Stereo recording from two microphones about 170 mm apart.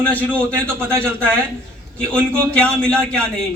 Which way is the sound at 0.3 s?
15° right (ahead or behind).